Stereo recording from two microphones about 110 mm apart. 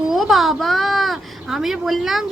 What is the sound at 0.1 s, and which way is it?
A woman's voice, centre (ahead or behind).